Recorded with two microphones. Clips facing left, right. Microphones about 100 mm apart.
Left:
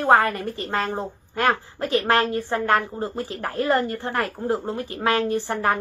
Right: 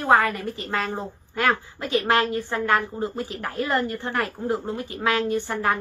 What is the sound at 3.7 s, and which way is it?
A woman's voice, 30° left (ahead or behind).